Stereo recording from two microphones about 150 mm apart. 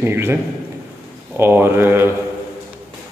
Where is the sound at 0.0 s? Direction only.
15° right (ahead or behind).